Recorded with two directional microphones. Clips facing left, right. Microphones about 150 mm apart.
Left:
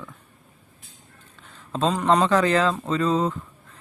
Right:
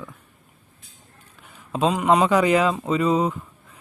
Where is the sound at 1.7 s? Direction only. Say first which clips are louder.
Right 1 dB; 10° right (ahead or behind).